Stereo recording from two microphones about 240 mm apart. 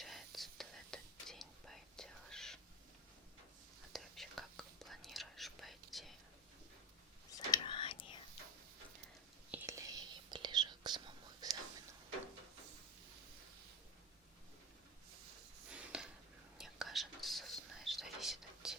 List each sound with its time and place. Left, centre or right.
0.0 s whispering: centre
3.9 s whispering: centre
7.3 s whispering: centre
9.5 s whispering: centre
15.7 s a sound: centre
16.6 s whispering: centre